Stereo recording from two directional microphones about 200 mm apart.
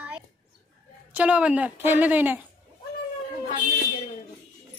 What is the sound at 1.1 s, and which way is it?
A woman's voice, 5° right (ahead or behind).